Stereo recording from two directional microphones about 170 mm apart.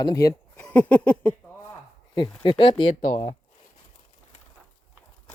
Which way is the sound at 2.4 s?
25° left (ahead or behind).